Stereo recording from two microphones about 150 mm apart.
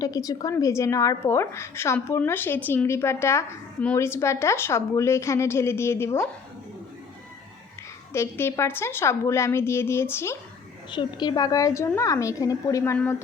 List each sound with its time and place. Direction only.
0.0 s a woman's voice: 20° left (ahead or behind)
8.1 s a woman's voice: 15° left (ahead or behind)
10.9 s a woman's voice: 30° left (ahead or behind)